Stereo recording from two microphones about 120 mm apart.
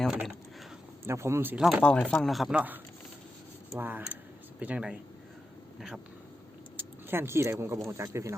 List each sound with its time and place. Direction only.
0.0 s speech: 5° right (ahead or behind)
1.0 s speech: 20° right (ahead or behind)
1.8 s speech: 10° left (ahead or behind)
2.6 s speech: 15° right (ahead or behind)
6.7 s speech: 20° right (ahead or behind)